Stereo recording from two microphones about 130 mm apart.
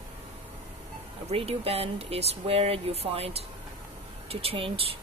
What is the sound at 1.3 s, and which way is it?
Speech, 50° right (ahead or behind).